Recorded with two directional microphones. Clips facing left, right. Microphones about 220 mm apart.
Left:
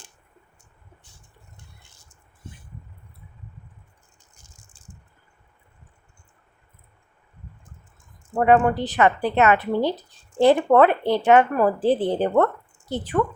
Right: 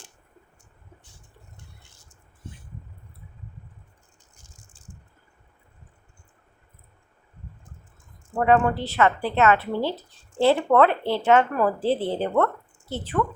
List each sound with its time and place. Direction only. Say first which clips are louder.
8.4 s a woman's voice: left 2 dB; 15° left (ahead or behind)